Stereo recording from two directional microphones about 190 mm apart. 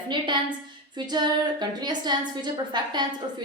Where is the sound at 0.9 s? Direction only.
20° right (ahead or behind).